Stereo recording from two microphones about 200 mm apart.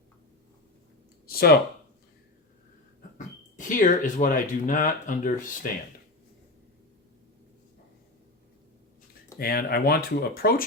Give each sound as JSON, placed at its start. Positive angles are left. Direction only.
{"t": 1.3, "sound": "a sound", "side_deg": 50}
{"t": 3.2, "sound": "speech", "side_deg": 40}
{"t": 9.4, "sound": "speech", "side_deg": 50}